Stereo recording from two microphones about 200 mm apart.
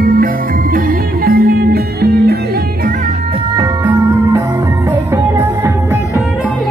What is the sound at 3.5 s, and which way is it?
Music, 15° right (ahead or behind).